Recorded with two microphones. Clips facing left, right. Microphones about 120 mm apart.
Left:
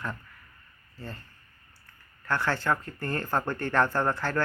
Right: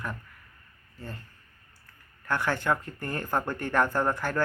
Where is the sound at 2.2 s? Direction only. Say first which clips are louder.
Even; 15° right (ahead or behind).